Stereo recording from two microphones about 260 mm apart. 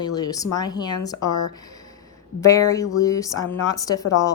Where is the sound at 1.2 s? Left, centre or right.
Left.